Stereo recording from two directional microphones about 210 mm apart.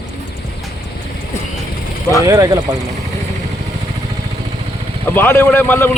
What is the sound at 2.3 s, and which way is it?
Speech, 15° right (ahead or behind).